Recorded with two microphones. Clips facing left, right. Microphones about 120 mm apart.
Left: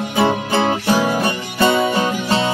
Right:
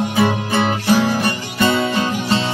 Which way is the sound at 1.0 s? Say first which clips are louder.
Even; 15° left (ahead or behind).